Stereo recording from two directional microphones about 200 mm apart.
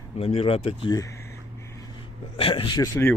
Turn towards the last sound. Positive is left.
turn(degrees=15)  # may be behind; listen again after turning